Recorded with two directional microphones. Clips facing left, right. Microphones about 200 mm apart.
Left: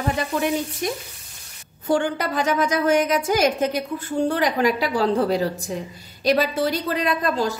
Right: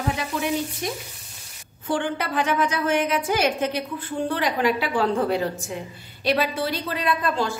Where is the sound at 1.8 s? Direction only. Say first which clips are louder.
Left 4 dB; 40° left (ahead or behind).